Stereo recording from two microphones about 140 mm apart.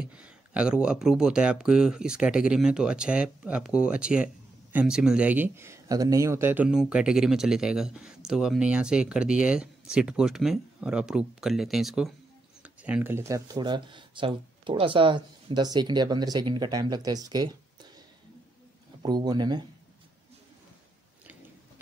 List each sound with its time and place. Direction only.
0.0 s speech: 10° right (ahead or behind)
13.6 s speech: 35° right (ahead or behind)
19.0 s speech: 30° right (ahead or behind)